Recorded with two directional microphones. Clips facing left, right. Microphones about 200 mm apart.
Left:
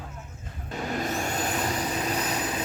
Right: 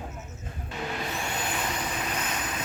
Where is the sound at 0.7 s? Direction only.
40° left (ahead or behind).